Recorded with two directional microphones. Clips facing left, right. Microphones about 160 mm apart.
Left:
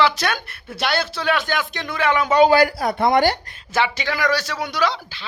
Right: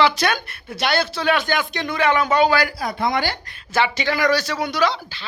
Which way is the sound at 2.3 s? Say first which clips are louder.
Left 3 dB; 35° left (ahead or behind).